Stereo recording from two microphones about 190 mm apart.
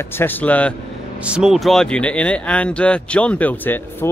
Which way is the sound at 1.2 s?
5° right (ahead or behind).